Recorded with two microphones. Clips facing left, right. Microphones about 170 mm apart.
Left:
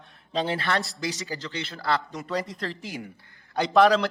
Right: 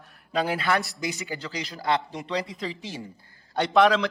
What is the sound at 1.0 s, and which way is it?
Speech, 35° left (ahead or behind).